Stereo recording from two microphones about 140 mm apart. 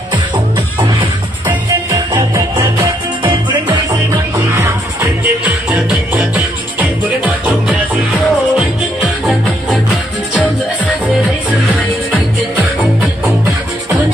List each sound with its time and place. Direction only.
1.9 s music: 25° right (ahead or behind)
4.6 s music: 20° right (ahead or behind); by 9.8 s centre (ahead or behind)